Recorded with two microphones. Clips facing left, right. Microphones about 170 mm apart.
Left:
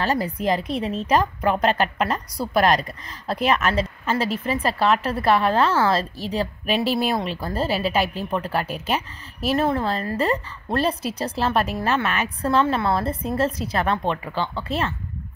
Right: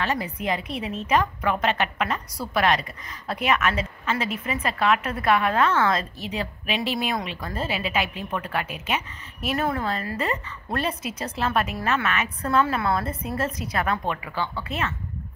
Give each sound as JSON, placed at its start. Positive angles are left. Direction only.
{"t": 0.0, "sound": "a woman's voice", "side_deg": 35}